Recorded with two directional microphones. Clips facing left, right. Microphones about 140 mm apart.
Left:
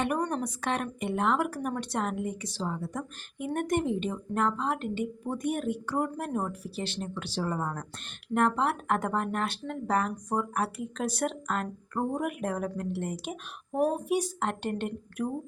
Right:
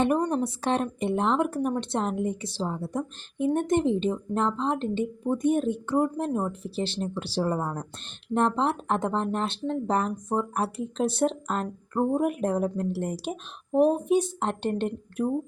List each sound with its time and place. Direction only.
0.0 s a woman's voice: 25° right (ahead or behind)
13.7 s a woman's voice: 25° right (ahead or behind)